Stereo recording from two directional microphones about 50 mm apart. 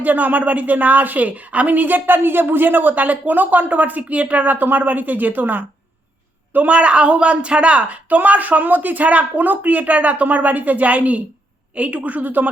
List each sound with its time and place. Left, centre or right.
0.0 s a woman's voice: right
6.7 s a woman's voice: right